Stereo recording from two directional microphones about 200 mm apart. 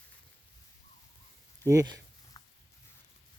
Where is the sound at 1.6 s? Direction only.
15° right (ahead or behind).